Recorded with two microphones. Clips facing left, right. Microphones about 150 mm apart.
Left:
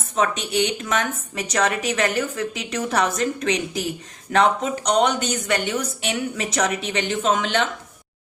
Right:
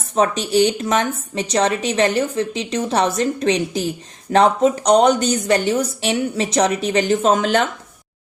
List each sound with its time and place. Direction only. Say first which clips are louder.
0.2 s a woman's voice: right 6 dB; 35° right (ahead or behind)